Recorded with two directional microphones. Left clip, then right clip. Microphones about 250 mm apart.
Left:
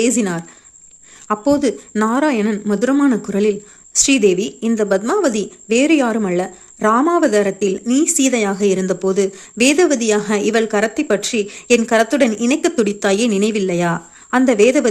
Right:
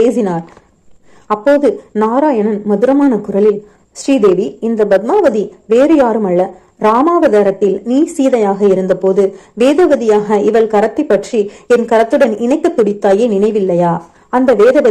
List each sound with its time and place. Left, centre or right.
0.2 s a woman's voice: left
3.9 s speech: left
4.8 s a woman's voice: left
5.3 s speech: left
7.6 s speech: left
8.5 s speech: left
9.7 s a woman's voice: left
10.7 s a woman's voice: left